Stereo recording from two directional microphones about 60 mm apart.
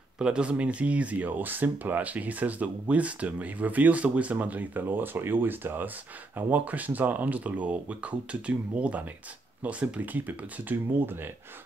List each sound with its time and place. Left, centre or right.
0.2 s speech: centre; by 11.1 s right